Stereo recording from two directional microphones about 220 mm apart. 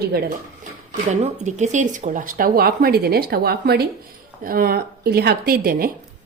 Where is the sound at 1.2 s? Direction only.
30° right (ahead or behind).